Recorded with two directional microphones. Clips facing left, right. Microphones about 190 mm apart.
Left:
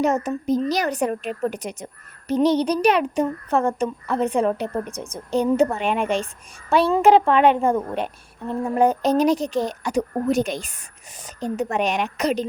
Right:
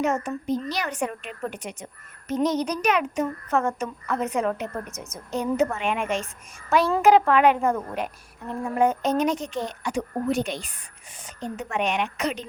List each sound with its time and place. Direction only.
0.0 s a woman's voice: 40° left (ahead or behind)